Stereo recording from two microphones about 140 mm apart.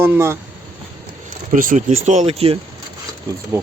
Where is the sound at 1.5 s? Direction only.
70° right (ahead or behind); by 2.6 s 45° right (ahead or behind).